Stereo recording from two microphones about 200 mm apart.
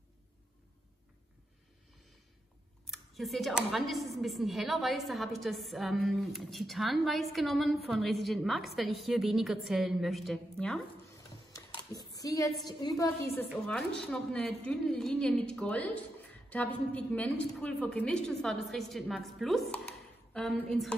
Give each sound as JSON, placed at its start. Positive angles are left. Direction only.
{"t": 2.9, "sound": "speech", "side_deg": 0}
{"t": 11.5, "sound": "a sound", "side_deg": 15}
{"t": 12.6, "sound": "a woman's voice", "side_deg": 20}
{"t": 13.7, "sound": "speech", "side_deg": 5}